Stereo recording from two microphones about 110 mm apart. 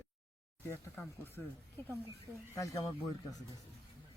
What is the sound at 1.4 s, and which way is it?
Speech, 20° left (ahead or behind).